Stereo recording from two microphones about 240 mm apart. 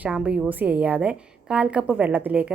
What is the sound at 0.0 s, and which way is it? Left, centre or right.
A woman's voice, centre.